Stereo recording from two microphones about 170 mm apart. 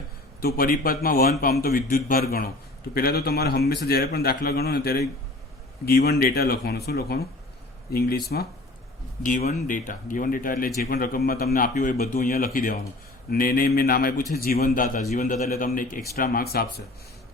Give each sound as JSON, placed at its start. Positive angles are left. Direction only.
{"t": 0.4, "sound": "a man's voice", "side_deg": 60}
{"t": 9.2, "sound": "a man's voice", "side_deg": 45}
{"t": 15.1, "sound": "a man's voice", "side_deg": 45}